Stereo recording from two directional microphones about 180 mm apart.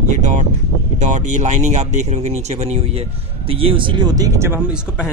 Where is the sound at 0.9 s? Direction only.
45° right (ahead or behind); by 4.6 s 15° right (ahead or behind).